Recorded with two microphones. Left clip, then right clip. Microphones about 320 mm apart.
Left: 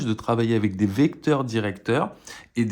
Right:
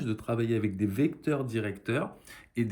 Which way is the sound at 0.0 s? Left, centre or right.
Centre.